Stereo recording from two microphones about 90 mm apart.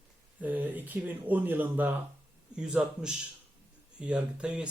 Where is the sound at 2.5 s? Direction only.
10° right (ahead or behind).